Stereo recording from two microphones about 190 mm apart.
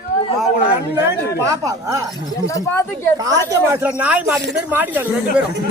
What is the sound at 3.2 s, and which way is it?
Speech, 15° right (ahead or behind).